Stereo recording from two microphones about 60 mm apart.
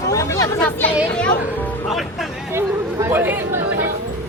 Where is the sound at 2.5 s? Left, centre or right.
Right.